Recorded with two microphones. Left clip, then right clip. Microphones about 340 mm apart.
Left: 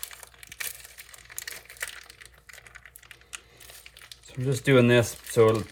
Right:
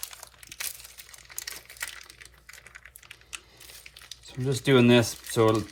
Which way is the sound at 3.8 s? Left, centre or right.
Centre.